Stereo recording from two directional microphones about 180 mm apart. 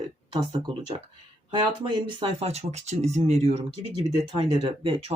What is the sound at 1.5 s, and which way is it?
Speech, 25° right (ahead or behind).